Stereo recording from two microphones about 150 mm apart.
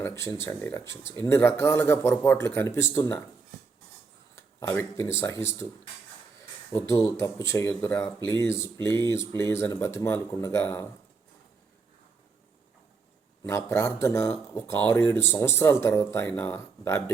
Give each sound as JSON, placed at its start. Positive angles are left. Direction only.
{"t": 0.0, "sound": "speech", "side_deg": 15}
{"t": 4.4, "sound": "speech", "side_deg": 15}
{"t": 6.7, "sound": "speech", "side_deg": 20}
{"t": 13.4, "sound": "speech", "side_deg": 20}